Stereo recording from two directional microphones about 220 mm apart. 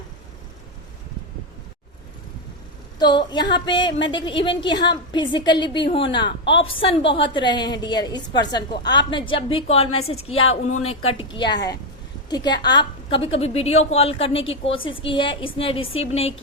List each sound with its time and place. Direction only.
3.0 s a woman's voice: 20° left (ahead or behind)
12.3 s a woman's voice: 20° left (ahead or behind)